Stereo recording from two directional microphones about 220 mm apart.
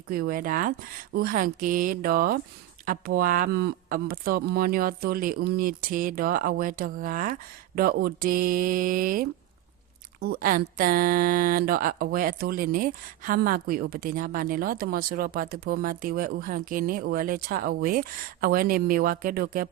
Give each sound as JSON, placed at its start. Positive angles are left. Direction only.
{"t": 0.1, "sound": "speech", "side_deg": -40}